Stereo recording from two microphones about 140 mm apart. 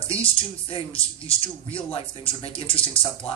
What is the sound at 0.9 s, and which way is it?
Speech, 40° left (ahead or behind).